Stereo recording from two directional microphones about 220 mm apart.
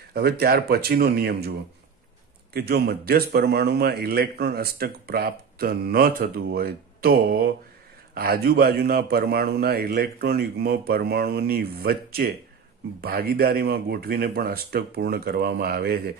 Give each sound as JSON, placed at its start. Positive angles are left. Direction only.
{"t": 0.1, "sound": "a man's voice", "side_deg": -45}
{"t": 2.5, "sound": "a man's voice", "side_deg": -45}